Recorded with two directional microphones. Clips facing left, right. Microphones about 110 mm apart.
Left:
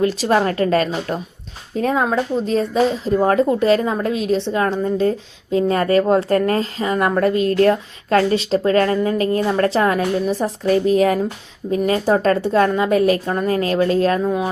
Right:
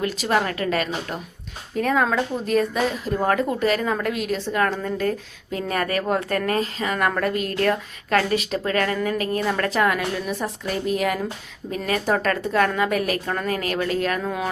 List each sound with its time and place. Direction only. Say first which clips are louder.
0.0 s speech: left 6 dB; 30° left (ahead or behind)
1.7 s speech: left 3 dB; 25° left (ahead or behind)
14.2 s speech: left 6 dB; 20° left (ahead or behind)